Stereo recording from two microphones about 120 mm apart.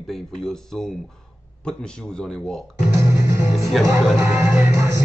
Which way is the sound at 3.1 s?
20° right (ahead or behind).